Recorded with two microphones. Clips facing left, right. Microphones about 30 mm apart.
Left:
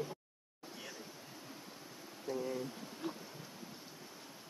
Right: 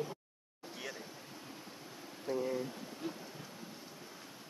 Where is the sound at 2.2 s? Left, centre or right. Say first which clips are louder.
Right 3 dB; centre.